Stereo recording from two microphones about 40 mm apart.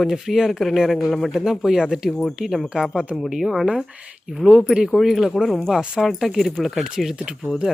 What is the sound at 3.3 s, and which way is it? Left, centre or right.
Speech, centre.